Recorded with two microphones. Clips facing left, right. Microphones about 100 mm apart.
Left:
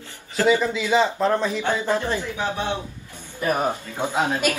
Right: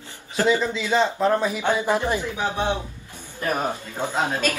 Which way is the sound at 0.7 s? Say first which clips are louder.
Left 1 dB; 10° left (ahead or behind).